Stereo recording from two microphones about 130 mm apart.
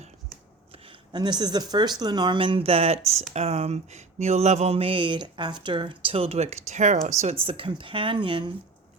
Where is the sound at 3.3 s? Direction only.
55° right (ahead or behind).